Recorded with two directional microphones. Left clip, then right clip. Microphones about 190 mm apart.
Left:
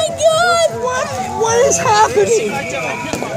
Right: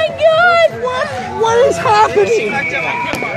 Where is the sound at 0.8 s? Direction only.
40° right (ahead or behind).